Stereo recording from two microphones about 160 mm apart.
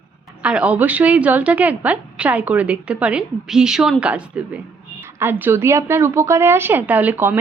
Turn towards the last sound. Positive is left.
turn(degrees=-10)  # may be behind; listen again after turning